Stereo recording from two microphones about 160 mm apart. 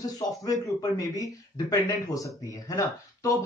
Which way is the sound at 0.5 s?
20° left (ahead or behind).